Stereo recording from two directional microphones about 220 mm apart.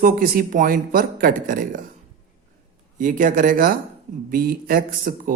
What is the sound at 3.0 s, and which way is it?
Speech, 35° right (ahead or behind).